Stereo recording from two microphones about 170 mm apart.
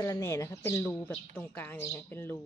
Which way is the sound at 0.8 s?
5° left (ahead or behind).